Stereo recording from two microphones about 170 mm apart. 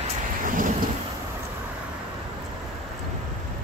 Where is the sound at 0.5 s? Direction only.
50° right (ahead or behind).